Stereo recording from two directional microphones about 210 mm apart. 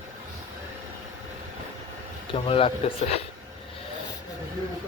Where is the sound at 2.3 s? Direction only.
25° left (ahead or behind).